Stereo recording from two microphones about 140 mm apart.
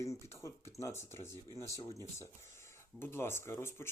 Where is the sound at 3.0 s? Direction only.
15° left (ahead or behind).